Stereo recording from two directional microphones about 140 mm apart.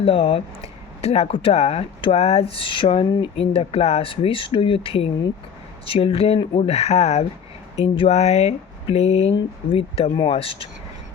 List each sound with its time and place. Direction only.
0.0 s speech: 40° left (ahead or behind)